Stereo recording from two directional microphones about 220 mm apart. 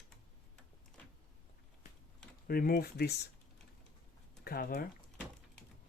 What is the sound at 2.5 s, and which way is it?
Speech, 40° left (ahead or behind).